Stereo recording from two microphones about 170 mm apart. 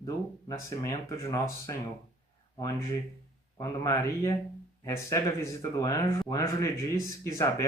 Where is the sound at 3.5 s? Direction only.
20° left (ahead or behind).